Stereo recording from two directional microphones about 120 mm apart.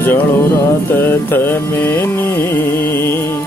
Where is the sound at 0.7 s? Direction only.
15° left (ahead or behind).